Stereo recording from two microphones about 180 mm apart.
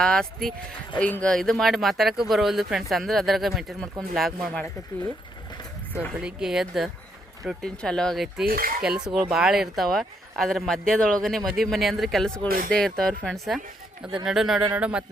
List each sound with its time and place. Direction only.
0.0 s speech: 5° left (ahead or behind)
6.1 s speech: 5° right (ahead or behind)
8.4 s cutlery: 55° right (ahead or behind)
8.8 s speech: 5° right (ahead or behind)
12.5 s speech: 50° right (ahead or behind)
12.7 s speech: centre (ahead or behind)